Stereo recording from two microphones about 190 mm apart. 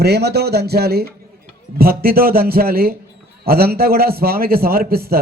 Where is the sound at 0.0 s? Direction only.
60° right (ahead or behind).